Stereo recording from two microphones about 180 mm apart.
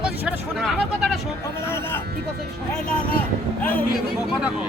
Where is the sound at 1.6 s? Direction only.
15° left (ahead or behind).